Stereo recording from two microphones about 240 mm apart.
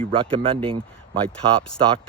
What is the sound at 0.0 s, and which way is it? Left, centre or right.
Speech, right.